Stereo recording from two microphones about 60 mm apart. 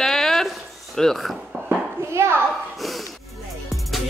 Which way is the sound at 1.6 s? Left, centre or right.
Right.